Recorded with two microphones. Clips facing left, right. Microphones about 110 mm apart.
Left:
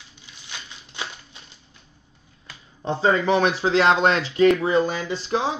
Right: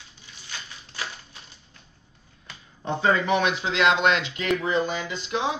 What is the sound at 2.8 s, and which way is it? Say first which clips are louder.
Speech: left 2 dB; 25° left (ahead or behind).